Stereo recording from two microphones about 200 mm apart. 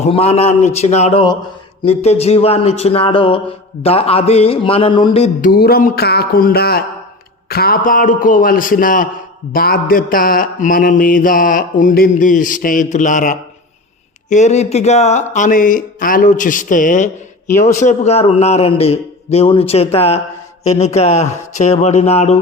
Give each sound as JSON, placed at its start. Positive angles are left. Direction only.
{"t": 0.0, "sound": "speech", "side_deg": 30}
{"t": 3.8, "sound": "a sound", "side_deg": 30}
{"t": 5.5, "sound": "mantra", "side_deg": 50}
{"t": 14.3, "sound": "speech", "side_deg": 35}